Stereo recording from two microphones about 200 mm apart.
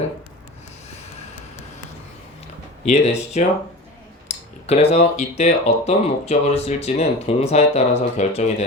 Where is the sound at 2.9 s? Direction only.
35° left (ahead or behind).